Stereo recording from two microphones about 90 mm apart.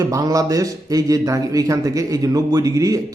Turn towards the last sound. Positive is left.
turn(degrees=-40)  # may be behind; listen again after turning